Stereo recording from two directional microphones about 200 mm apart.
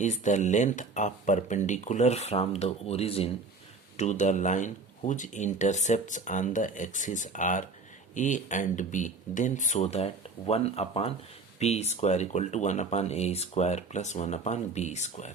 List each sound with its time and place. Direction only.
0.0 s speech: 35° left (ahead or behind)